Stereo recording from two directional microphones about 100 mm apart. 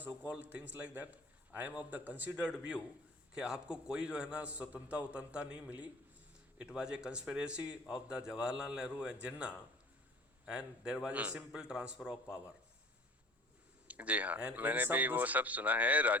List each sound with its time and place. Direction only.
0.3 s a man's voice: 15° right (ahead or behind)
13.8 s a man's voice: 15° right (ahead or behind)